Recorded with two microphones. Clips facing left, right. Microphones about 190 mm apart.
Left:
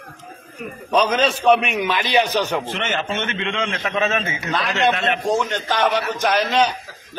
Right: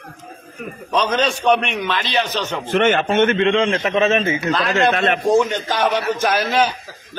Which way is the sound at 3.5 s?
30° right (ahead or behind).